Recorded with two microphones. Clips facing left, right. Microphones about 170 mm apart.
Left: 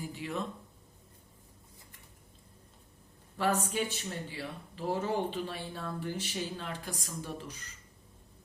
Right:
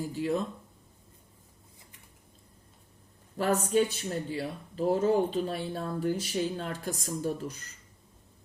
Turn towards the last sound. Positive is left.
turn(degrees=-45)  # may be behind; listen again after turning